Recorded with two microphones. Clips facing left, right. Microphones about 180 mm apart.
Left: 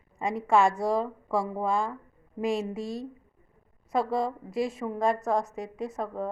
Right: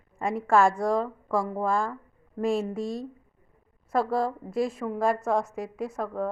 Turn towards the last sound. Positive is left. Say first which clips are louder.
# right 2 dB
turn(degrees=0)  # may be behind; listen again after turning